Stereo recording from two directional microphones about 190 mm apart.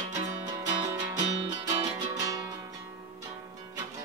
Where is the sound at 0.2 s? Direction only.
20° right (ahead or behind).